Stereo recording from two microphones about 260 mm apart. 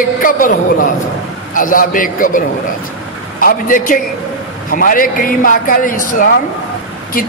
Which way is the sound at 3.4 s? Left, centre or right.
Left.